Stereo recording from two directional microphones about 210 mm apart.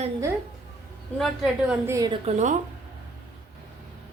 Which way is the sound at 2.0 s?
20° right (ahead or behind).